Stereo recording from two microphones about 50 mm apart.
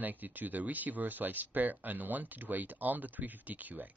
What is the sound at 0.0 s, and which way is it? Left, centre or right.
Speech, right.